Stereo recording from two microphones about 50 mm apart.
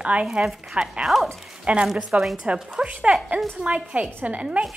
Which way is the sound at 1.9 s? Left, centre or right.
Centre.